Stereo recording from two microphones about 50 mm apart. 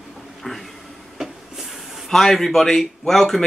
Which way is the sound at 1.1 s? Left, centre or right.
Centre.